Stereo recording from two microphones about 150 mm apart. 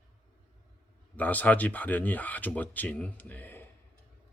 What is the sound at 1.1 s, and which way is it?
Speech, 10° left (ahead or behind).